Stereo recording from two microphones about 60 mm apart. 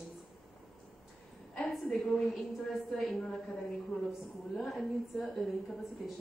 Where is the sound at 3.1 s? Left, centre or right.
Centre.